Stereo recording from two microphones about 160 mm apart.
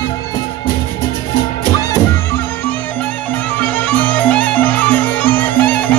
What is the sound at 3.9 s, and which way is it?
Music, 10° left (ahead or behind).